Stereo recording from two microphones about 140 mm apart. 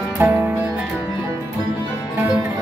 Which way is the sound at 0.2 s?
15° right (ahead or behind).